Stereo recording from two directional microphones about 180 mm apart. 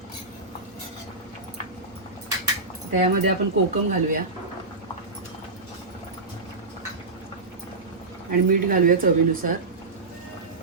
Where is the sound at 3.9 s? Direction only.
50° right (ahead or behind).